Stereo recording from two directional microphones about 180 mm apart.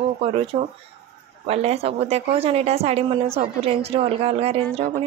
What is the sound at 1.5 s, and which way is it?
A woman's voice, 35° right (ahead or behind).